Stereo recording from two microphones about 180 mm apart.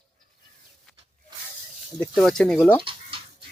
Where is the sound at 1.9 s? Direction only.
5° left (ahead or behind).